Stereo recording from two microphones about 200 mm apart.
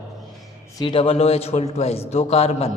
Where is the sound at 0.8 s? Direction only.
25° left (ahead or behind).